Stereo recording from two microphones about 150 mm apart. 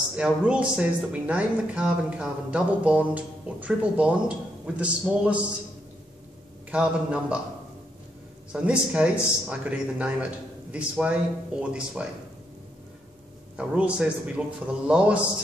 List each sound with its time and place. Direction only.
0.1 s speech: 5° right (ahead or behind)
6.7 s speech: 5° right (ahead or behind)
8.5 s speech: 5° right (ahead or behind)
13.6 s speech: 10° right (ahead or behind)